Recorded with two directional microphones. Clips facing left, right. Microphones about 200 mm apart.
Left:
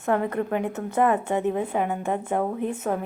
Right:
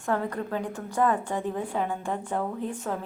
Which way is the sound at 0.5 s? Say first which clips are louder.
Left 5 dB; 20° left (ahead or behind).